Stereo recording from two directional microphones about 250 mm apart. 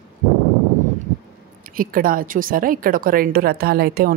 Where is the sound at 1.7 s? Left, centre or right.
Right.